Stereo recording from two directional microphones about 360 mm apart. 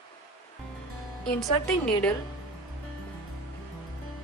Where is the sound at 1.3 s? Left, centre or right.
Centre.